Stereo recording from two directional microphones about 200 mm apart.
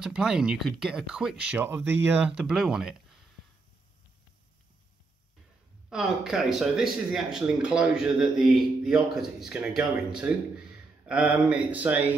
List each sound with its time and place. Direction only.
0.0 s speech: 5° right (ahead or behind)
5.9 s speech: centre (ahead or behind)